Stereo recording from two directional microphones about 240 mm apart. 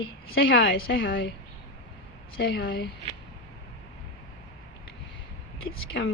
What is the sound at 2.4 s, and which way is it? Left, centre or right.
Speech, left.